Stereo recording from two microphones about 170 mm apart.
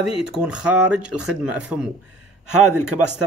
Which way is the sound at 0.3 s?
5° right (ahead or behind).